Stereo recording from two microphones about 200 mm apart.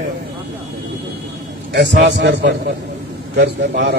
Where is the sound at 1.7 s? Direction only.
60° right (ahead or behind).